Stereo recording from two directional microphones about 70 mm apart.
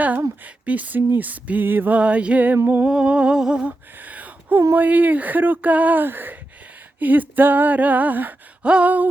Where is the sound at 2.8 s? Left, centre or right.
Centre.